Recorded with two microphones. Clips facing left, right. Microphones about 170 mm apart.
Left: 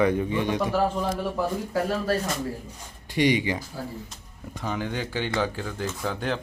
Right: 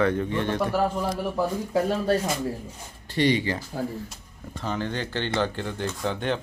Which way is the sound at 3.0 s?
15° left (ahead or behind).